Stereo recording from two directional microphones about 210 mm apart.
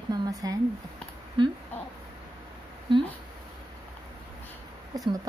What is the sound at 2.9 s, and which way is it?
Speech, 20° right (ahead or behind).